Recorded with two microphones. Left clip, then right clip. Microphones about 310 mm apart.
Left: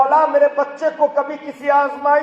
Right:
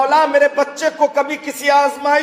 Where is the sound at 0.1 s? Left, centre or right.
Right.